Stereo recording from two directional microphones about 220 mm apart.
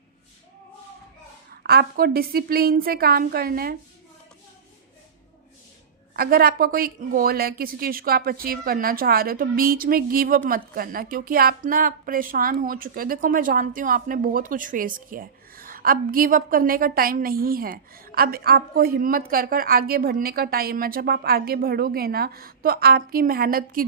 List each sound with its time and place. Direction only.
1.6 s a woman's voice: 45° right (ahead or behind)
6.1 s a woman's voice: 45° right (ahead or behind)